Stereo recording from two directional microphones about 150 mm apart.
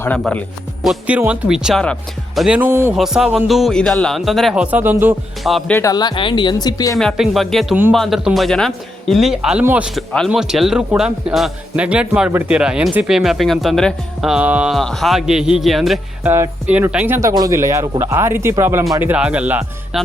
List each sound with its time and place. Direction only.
0.9 s a man's voice: 10° right (ahead or behind)
2.9 s a man's voice: 5° right (ahead or behind)
5.4 s a man's voice: centre (ahead or behind)
5.7 s speech: 25° left (ahead or behind)
7.0 s a man's voice: centre (ahead or behind)
16.2 s speech: 15° right (ahead or behind)
17.2 s speech: 20° right (ahead or behind)